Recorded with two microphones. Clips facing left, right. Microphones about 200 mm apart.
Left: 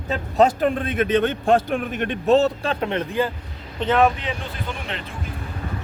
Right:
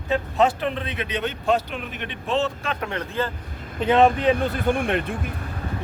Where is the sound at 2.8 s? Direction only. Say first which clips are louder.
Left 4 dB; 20° left (ahead or behind).